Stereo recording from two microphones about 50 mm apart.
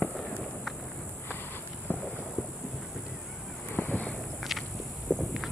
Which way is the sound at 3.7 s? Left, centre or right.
Left.